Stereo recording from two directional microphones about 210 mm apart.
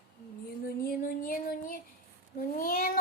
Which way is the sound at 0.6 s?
45° left (ahead or behind).